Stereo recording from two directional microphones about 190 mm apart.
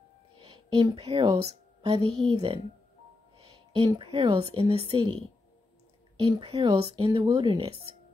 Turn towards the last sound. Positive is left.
turn(degrees=-30)  # may be behind; listen again after turning